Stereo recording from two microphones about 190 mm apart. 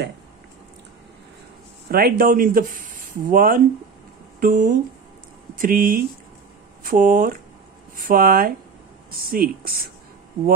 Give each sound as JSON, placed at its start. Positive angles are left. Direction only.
{"t": 1.9, "sound": "speech", "side_deg": -50}